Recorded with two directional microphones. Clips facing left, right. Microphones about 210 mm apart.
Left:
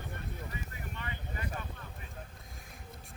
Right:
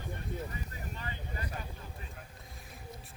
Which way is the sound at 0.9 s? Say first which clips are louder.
Even; 35° right (ahead or behind).